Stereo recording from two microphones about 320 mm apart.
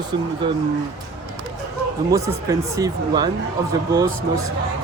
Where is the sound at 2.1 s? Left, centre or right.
Centre.